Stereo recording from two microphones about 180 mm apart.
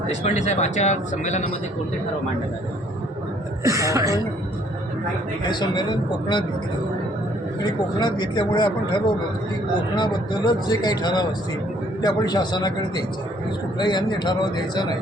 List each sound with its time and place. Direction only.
0.1 s speech: 40° left (ahead or behind)
3.6 s speech: 20° right (ahead or behind)
5.5 s speech: 25° left (ahead or behind)
7.6 s speech: 25° left (ahead or behind)